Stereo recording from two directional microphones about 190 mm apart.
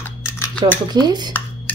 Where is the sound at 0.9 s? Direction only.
20° right (ahead or behind).